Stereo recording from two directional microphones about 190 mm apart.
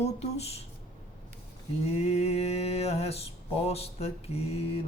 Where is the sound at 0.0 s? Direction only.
35° left (ahead or behind).